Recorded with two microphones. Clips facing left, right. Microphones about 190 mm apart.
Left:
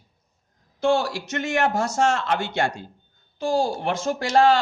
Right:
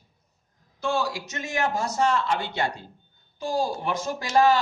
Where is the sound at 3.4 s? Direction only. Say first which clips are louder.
Left 4 dB; 90° left.